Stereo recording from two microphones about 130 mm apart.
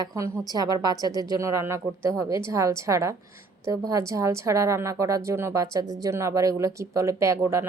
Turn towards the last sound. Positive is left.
turn(degrees=-20)  # may be behind; listen again after turning